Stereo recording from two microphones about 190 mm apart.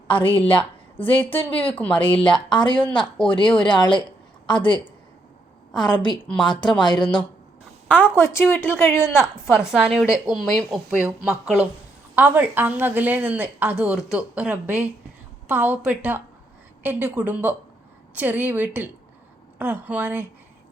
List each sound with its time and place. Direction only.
0.1 s a woman's voice: 25° left (ahead or behind)
1.1 s a woman's voice: 10° left (ahead or behind)
2.2 s speech: 25° left (ahead or behind)
8.0 s a woman's voice: 10° left (ahead or behind)
9.1 s a woman's voice: 5° right (ahead or behind)